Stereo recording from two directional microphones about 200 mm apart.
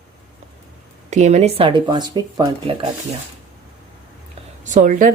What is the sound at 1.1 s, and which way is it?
Speech, 35° right (ahead or behind).